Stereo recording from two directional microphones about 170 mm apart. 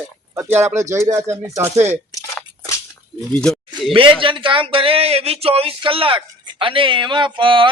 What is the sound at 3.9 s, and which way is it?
Speech, 30° right (ahead or behind).